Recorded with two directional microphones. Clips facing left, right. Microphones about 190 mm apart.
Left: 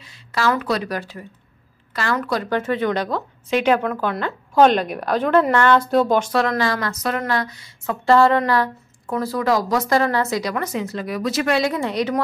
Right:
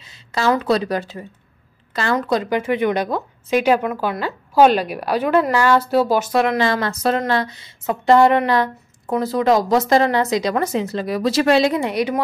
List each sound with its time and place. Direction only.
0.0 s a woman's voice: 25° right (ahead or behind)